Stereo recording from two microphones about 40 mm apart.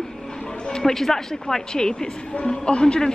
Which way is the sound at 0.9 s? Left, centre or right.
Centre.